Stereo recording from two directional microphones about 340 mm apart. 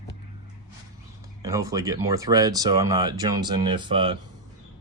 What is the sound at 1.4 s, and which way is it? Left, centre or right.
Speech, centre.